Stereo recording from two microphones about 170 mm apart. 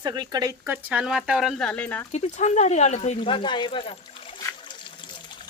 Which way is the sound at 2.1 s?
40° left (ahead or behind).